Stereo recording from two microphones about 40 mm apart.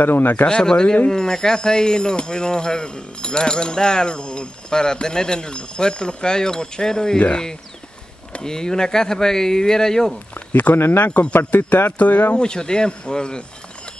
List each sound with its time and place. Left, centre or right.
0.0 s speech: left
0.5 s speech: left
8.5 s speech: centre
10.3 s speech: left
11.1 s speech: left
11.3 s speech: left
12.4 s speech: left